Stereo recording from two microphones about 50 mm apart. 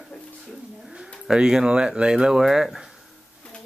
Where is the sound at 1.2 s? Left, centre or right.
Centre.